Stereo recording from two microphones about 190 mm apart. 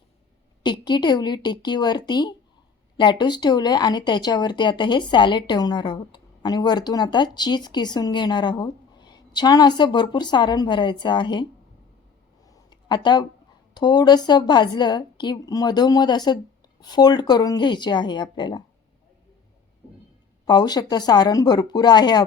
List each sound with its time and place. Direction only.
0.6 s speech: 25° left (ahead or behind)
12.5 s a sound: 25° left (ahead or behind)
13.7 s speech: 20° left (ahead or behind)
20.4 s speech: 20° left (ahead or behind)